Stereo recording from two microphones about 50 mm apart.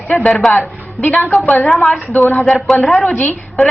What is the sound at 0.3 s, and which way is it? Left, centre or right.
Speech, centre.